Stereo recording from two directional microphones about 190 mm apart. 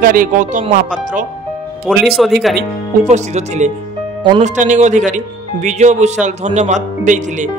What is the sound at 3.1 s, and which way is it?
Speech, 35° right (ahead or behind).